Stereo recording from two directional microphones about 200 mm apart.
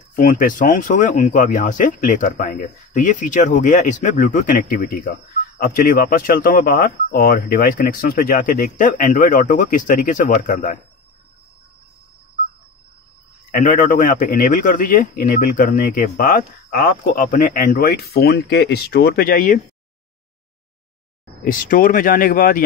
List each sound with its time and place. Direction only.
0.1 s a man's voice: 40° left (ahead or behind)
13.5 s a man's voice: 40° left (ahead or behind)
21.5 s a man's voice: 45° left (ahead or behind)